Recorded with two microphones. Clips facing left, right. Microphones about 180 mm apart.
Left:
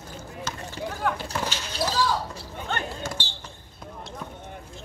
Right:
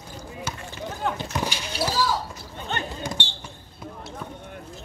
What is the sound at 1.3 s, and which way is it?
Basketball bounce, 10° right (ahead or behind).